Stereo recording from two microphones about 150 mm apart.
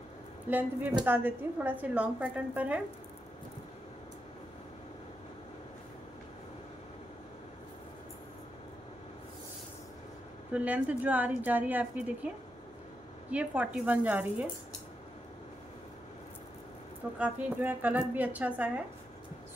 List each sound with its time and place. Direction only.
0.5 s a woman's voice: 10° right (ahead or behind)
10.5 s a woman's voice: 10° right (ahead or behind)
13.3 s a woman's voice: 10° right (ahead or behind)
17.2 s a woman's voice: 10° right (ahead or behind)